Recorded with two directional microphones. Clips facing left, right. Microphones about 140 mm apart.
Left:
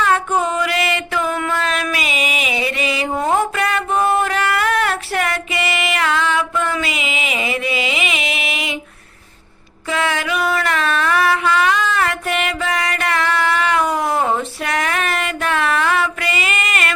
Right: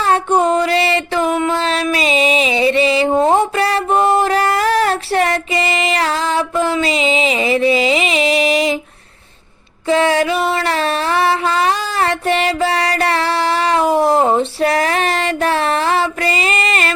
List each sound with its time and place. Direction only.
0.0 s a sound: 30° right (ahead or behind)
1.3 s music: 25° right (ahead or behind)
9.9 s music: 30° right (ahead or behind)